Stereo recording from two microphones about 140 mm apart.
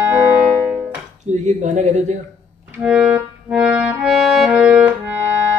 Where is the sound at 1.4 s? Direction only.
55° right (ahead or behind).